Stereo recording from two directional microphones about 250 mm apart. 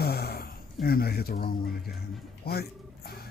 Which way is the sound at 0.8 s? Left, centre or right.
Left.